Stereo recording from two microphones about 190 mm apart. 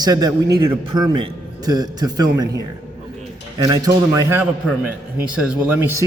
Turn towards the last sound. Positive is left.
turn(degrees=-10)  # may be behind; listen again after turning